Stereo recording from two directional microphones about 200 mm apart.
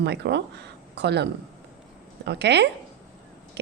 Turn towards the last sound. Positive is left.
turn(degrees=-60)  # may be behind; listen again after turning